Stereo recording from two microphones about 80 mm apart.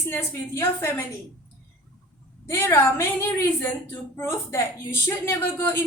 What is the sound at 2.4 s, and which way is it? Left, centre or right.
A woman's voice, left.